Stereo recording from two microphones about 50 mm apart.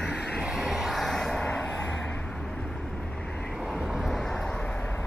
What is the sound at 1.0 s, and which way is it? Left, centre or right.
Vehicle, centre.